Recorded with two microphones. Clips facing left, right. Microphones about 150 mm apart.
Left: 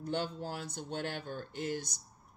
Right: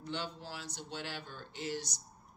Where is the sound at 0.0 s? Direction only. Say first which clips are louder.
Left 5 dB; 50° left (ahead or behind).